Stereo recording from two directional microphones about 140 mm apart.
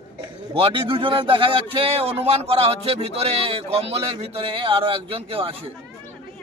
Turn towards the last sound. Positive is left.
turn(degrees=-40)  # may be behind; listen again after turning